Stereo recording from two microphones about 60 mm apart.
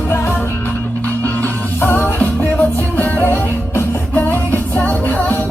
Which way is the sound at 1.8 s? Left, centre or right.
Left.